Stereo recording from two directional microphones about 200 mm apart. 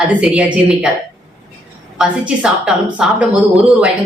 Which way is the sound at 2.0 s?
5° right (ahead or behind).